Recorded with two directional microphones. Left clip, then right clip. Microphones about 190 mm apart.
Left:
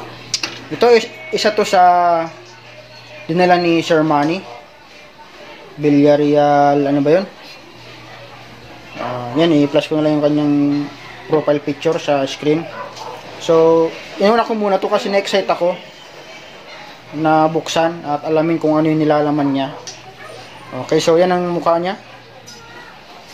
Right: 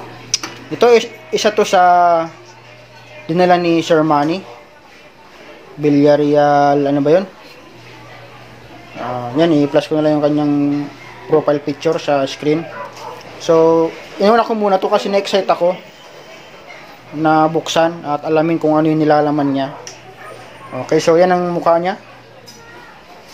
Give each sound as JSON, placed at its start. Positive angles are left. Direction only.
{"t": 0.3, "sound": "speech", "side_deg": -15}
{"t": 3.3, "sound": "speech", "side_deg": -15}
{"t": 5.8, "sound": "speech", "side_deg": -15}
{"t": 9.4, "sound": "speech", "side_deg": -10}
{"t": 17.2, "sound": "speech", "side_deg": -15}
{"t": 20.9, "sound": "speech", "side_deg": -10}